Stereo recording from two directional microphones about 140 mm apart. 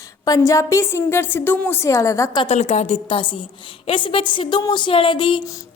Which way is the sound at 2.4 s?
50° left (ahead or behind).